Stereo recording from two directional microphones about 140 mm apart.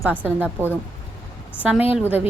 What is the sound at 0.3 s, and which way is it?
Speech, 10° right (ahead or behind).